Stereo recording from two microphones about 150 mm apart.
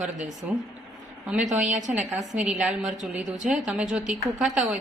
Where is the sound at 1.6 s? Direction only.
55° right (ahead or behind).